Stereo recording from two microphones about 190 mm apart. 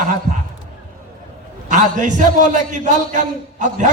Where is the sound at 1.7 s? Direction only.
40° right (ahead or behind).